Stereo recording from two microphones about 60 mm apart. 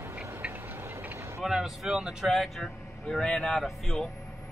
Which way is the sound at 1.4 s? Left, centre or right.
Centre.